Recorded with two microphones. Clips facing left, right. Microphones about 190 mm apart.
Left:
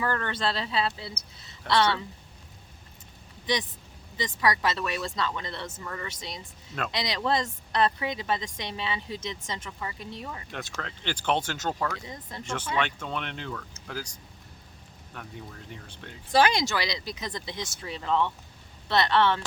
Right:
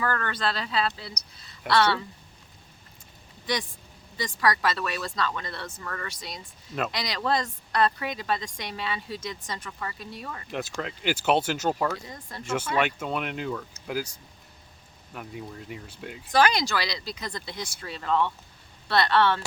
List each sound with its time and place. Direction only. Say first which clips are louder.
0.0 s a woman's voice: even; 20° left (ahead or behind)
3.4 s a woman's voice: left 1 dB; 20° left (ahead or behind)
10.5 s speech: right 5 dB; 5° right (ahead or behind)
12.0 s a woman's voice: left 1 dB; 20° left (ahead or behind)
12.7 s speech: right 2 dB; 10° right (ahead or behind)
15.1 s speech: right 4 dB; 5° right (ahead or behind)
16.3 s a woman's voice: even; 25° left (ahead or behind)